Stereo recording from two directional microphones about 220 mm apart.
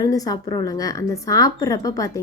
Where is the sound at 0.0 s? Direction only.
15° left (ahead or behind).